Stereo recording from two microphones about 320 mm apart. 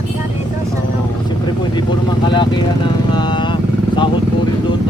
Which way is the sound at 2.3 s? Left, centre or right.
Centre.